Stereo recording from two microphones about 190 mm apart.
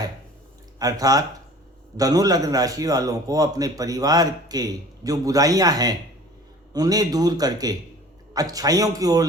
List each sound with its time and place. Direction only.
0.8 s a man's voice: 20° right (ahead or behind)